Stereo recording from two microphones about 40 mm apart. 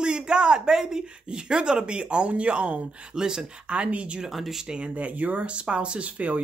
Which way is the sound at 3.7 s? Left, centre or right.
Right.